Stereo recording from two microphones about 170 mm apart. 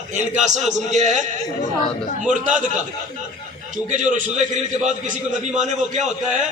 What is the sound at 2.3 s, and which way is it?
Speech, 50° right (ahead or behind).